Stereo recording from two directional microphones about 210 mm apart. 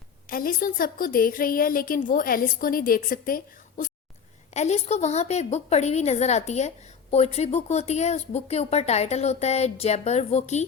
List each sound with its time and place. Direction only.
0.3 s a woman's voice: 40° left (ahead or behind)